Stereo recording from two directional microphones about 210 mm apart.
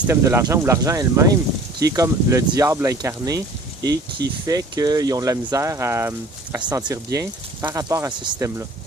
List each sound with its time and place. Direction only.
0.1 s speech: 15° right (ahead or behind)
4.4 s speech: 15° right (ahead or behind)